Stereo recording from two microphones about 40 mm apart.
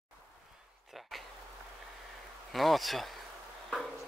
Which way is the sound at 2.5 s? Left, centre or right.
Centre.